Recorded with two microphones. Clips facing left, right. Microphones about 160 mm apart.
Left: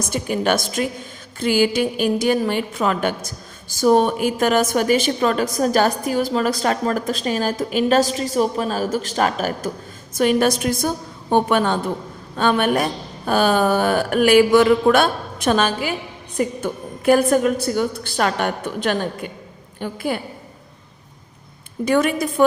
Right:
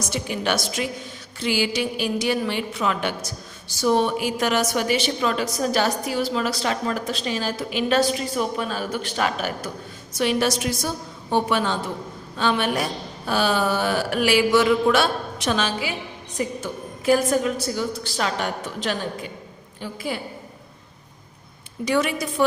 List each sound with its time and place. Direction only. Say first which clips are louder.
0.1 s a woman's voice: left 5 dB; 50° left (ahead or behind)
21.8 s a woman's voice: left 4 dB; 50° left (ahead or behind)